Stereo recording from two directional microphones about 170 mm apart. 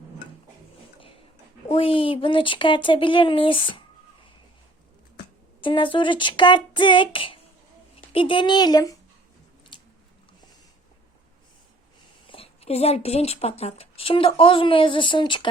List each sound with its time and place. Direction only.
1.6 s speech: 30° left (ahead or behind)
5.5 s speech: 30° left (ahead or behind)
9.7 s biting: 25° left (ahead or behind)
12.3 s speech: 35° left (ahead or behind)